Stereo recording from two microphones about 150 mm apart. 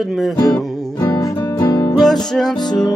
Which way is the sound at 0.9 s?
20° left (ahead or behind).